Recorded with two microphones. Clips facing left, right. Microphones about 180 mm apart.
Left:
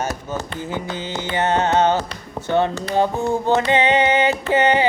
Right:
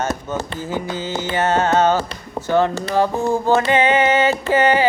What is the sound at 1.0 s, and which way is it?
Speech, 15° left (ahead or behind).